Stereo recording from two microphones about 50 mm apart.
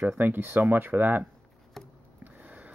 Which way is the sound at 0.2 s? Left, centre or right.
Right.